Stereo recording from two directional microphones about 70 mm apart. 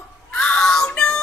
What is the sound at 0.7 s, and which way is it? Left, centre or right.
Child singing, centre.